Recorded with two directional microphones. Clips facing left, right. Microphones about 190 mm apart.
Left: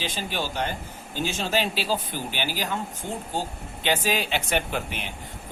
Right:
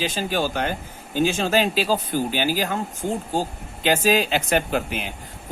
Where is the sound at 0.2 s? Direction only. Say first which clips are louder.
Right 5 dB; 45° right (ahead or behind).